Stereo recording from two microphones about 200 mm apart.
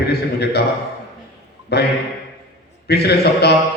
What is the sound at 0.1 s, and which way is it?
Speech, 55° left (ahead or behind).